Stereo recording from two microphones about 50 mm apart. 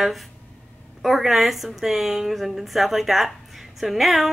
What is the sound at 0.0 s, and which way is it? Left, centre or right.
A woman's voice, centre.